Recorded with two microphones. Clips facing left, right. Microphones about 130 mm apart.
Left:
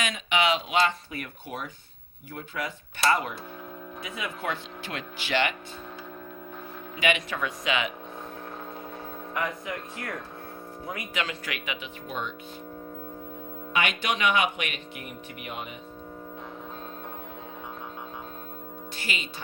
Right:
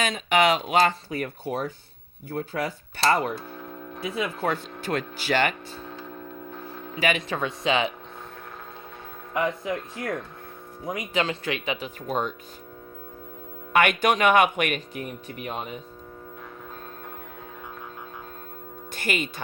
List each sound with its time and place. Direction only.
0.0 s speech: 40° right (ahead or behind)
6.9 s speech: 40° right (ahead or behind)
9.3 s speech: 25° right (ahead or behind)
10.8 s speech: 20° right (ahead or behind)
11.1 s speech: 30° right (ahead or behind)
13.7 s speech: 50° right (ahead or behind)
15.3 s speech: 35° right (ahead or behind)
18.9 s speech: 50° right (ahead or behind)